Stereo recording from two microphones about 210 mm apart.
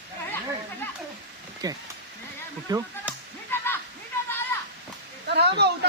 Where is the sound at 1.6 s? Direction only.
20° right (ahead or behind).